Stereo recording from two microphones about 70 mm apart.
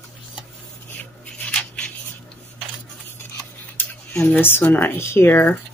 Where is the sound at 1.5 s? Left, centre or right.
Centre.